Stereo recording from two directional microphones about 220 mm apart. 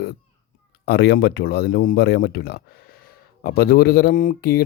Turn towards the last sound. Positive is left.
turn(degrees=40)  # may be behind; listen again after turning